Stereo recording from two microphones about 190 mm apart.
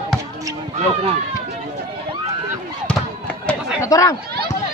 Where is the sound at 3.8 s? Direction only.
20° left (ahead or behind).